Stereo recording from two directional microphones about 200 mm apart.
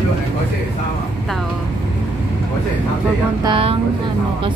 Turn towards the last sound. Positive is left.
turn(degrees=-25)  # may be behind; listen again after turning